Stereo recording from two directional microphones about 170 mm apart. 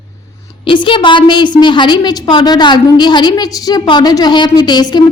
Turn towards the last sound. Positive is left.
turn(degrees=25)  # may be behind; listen again after turning